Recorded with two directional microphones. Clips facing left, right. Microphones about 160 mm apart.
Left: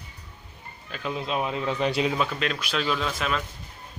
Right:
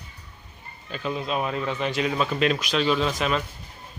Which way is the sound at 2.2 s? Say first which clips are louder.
Right 6 dB; 10° right (ahead or behind).